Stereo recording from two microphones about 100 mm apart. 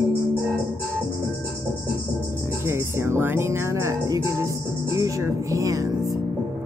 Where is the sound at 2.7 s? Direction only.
25° right (ahead or behind).